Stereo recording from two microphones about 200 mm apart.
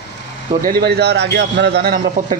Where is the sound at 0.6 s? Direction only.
50° right (ahead or behind).